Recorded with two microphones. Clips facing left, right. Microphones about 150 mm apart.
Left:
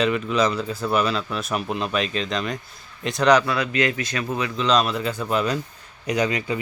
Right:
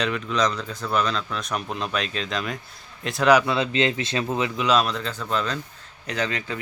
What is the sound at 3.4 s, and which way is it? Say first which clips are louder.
A man's voice: even; 25° right (ahead or behind).